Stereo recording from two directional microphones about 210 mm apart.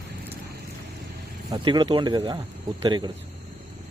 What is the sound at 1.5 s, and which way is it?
Speech, 20° right (ahead or behind).